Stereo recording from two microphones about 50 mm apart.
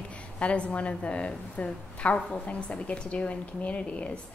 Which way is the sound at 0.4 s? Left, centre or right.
Left.